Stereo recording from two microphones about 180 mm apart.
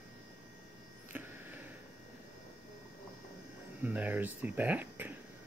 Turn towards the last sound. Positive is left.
turn(degrees=-10)  # may be behind; listen again after turning